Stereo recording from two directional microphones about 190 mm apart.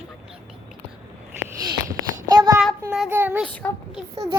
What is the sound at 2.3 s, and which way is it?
Speech, 20° right (ahead or behind).